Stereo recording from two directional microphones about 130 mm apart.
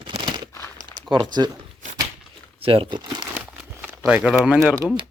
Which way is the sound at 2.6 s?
45° right (ahead or behind).